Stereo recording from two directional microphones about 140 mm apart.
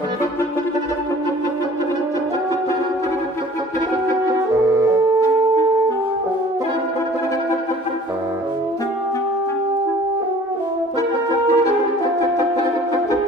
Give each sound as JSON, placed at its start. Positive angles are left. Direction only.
{"t": 11.4, "sound": "french horn", "side_deg": 20}